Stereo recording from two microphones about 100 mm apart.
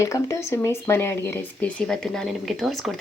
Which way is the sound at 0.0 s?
30° left (ahead or behind).